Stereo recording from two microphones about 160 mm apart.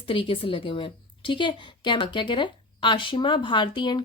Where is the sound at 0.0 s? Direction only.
35° left (ahead or behind).